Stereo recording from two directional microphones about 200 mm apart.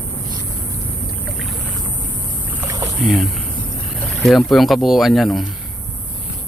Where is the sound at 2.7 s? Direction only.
15° right (ahead or behind).